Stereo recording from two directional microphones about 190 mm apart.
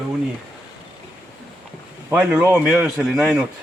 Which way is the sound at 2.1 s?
10° right (ahead or behind).